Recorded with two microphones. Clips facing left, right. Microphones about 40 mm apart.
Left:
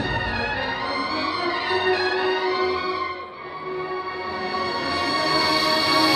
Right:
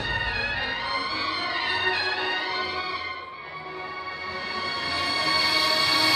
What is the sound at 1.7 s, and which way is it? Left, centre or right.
Music, centre.